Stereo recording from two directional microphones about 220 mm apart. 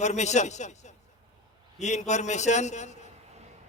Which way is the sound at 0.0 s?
30° left (ahead or behind).